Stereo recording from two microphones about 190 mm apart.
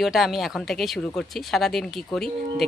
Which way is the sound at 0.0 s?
Centre (ahead or behind).